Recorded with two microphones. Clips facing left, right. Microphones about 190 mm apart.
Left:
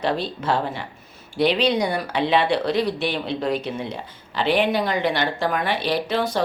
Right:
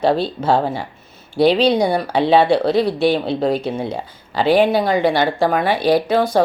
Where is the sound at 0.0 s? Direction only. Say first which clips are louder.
Right 7 dB; 30° right (ahead or behind).